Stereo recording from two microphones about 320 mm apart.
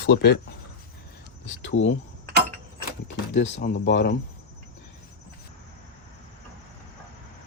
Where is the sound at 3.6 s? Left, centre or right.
Left.